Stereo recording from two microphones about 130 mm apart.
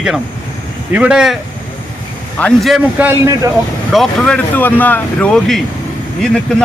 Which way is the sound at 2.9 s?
15° right (ahead or behind).